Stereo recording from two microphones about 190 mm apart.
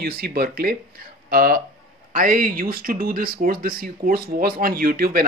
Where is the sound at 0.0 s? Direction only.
55° right (ahead or behind).